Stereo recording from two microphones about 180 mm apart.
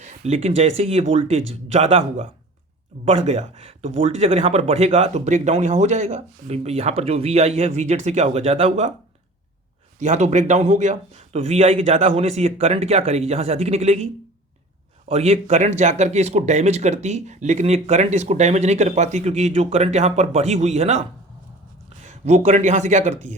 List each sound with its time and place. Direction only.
0.0 s speech: 35° right (ahead or behind)
10.0 s speech: 40° right (ahead or behind)